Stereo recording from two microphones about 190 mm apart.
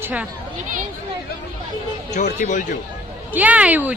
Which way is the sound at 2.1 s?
40° left (ahead or behind).